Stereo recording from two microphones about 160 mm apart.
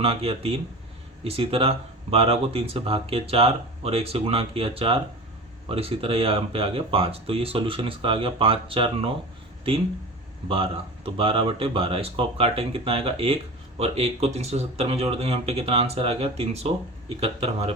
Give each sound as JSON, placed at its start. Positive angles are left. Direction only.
{"t": 0.0, "sound": "speech", "side_deg": -35}
{"t": 10.5, "sound": "speech", "side_deg": -35}